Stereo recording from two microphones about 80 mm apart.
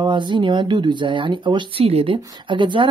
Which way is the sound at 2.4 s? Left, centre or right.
Right.